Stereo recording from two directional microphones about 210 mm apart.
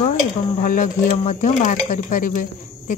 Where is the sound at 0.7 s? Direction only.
40° left (ahead or behind).